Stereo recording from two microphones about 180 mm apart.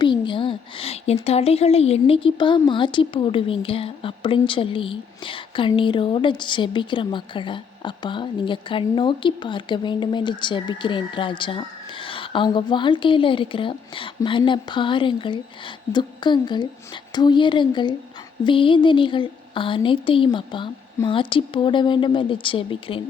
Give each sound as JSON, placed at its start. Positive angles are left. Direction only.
{"t": 0.0, "sound": "a woman's voice", "side_deg": 25}